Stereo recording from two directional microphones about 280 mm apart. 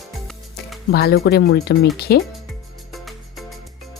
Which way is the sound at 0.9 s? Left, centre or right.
Left.